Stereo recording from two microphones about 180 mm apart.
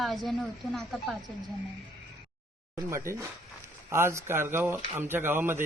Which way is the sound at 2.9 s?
15° right (ahead or behind).